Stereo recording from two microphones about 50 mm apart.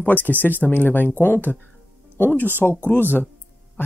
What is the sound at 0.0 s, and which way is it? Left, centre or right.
Speech, left.